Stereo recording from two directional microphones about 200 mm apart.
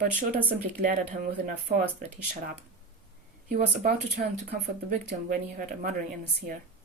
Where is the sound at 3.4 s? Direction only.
45° right (ahead or behind).